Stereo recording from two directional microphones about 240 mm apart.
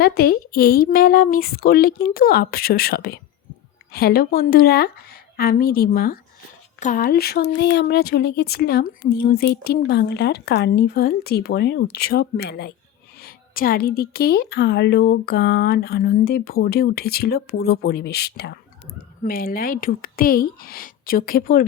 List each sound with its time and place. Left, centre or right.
0.0 s a woman's voice: left